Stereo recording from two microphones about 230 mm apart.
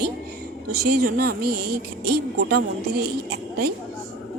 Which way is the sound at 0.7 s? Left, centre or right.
Right.